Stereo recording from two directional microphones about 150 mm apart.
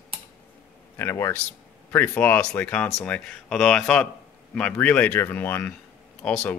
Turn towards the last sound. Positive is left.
turn(degrees=10)  # may be behind; listen again after turning